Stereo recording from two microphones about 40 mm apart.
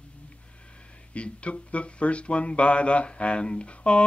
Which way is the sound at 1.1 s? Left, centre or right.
Left.